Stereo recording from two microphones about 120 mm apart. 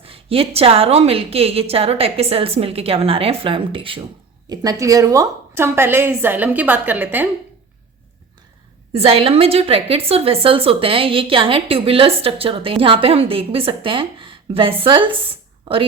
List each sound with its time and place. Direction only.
0.0 s a woman's voice: 50° right (ahead or behind)
4.4 s a woman's voice: 35° right (ahead or behind); by 7.3 s 15° right (ahead or behind)
8.9 s a woman's voice: 55° right (ahead or behind)